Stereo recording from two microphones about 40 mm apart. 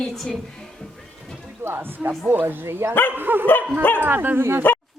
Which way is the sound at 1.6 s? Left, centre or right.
Right.